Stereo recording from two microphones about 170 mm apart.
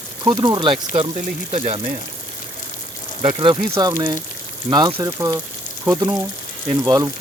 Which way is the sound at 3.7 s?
20° right (ahead or behind).